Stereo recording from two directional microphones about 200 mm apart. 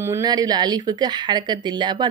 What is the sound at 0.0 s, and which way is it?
Speech, 15° right (ahead or behind).